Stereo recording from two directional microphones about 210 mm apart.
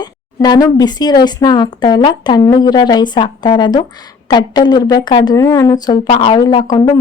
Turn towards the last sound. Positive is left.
turn(degrees=25)  # may be behind; listen again after turning